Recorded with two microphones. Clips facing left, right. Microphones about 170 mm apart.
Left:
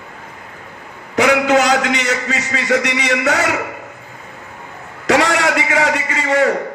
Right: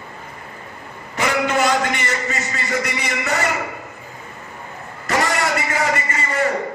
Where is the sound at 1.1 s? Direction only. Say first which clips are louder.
Left 6 dB; 85° left.